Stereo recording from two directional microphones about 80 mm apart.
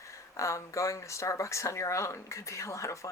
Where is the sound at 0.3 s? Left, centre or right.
Left.